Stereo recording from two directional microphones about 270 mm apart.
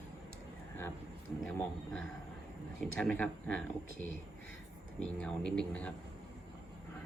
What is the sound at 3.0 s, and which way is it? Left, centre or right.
Speech, centre.